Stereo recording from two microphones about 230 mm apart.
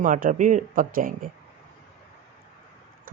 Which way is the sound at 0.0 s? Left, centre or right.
Right.